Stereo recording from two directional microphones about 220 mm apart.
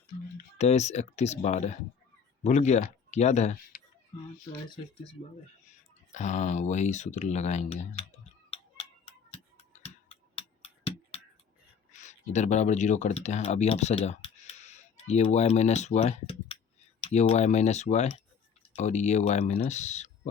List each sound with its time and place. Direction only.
0.6 s speech: 30° left (ahead or behind)
6.1 s speech: 35° left (ahead or behind)
9.3 s tick-tock: 30° left (ahead or behind)
11.9 s speech: 35° left (ahead or behind)